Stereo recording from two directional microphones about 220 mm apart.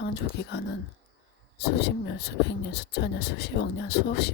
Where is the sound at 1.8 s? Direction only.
45° left (ahead or behind).